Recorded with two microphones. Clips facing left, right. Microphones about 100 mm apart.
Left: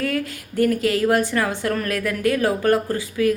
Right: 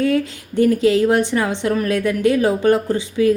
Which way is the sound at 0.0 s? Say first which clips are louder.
Right 6 dB; 25° right (ahead or behind).